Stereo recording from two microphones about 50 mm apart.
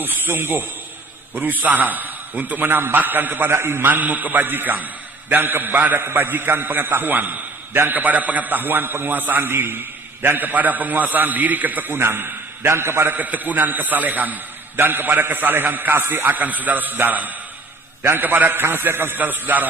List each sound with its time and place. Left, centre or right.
0.0 s a man's voice: right
1.4 s a man's voice: right
13.1 s a man's voice: right
18.0 s a man's voice: right